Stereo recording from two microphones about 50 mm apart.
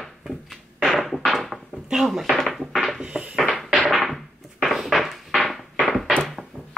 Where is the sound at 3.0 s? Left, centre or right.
Centre.